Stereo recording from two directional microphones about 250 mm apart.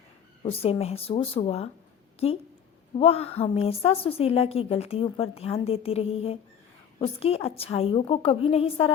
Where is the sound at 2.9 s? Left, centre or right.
Left.